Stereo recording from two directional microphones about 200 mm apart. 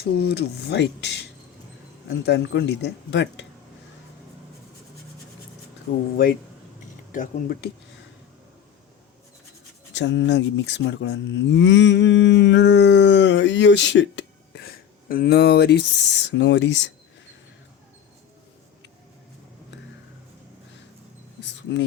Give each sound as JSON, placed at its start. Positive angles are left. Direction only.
{"t": 0.0, "sound": "moo", "side_deg": 55}
{"t": 7.1, "sound": "speech", "side_deg": 40}
{"t": 9.9, "sound": "moo", "side_deg": 65}
{"t": 21.4, "sound": "a sound", "side_deg": 65}